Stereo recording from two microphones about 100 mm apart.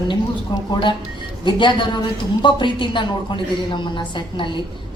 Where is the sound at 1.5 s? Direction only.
50° left (ahead or behind).